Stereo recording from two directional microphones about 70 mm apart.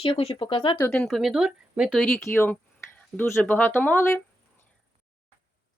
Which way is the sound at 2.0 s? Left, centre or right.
Left.